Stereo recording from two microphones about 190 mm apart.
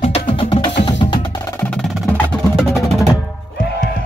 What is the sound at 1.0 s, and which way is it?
Percussion, 20° left (ahead or behind).